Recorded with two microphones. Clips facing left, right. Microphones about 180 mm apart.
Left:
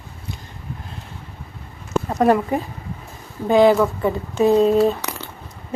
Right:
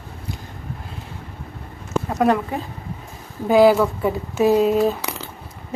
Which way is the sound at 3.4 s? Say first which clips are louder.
Even; 5° right (ahead or behind).